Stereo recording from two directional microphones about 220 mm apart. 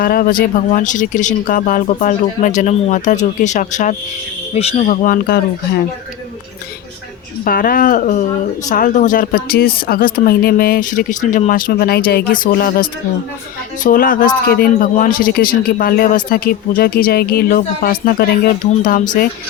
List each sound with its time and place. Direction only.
0.0 s speech: 40° left (ahead or behind)
7.4 s speech: 40° left (ahead or behind)